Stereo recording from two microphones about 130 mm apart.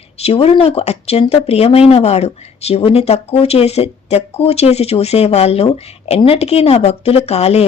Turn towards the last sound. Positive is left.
turn(degrees=55)  # may be behind; listen again after turning